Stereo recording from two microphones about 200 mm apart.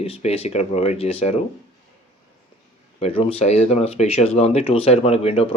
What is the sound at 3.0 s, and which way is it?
Speech, 30° left (ahead or behind).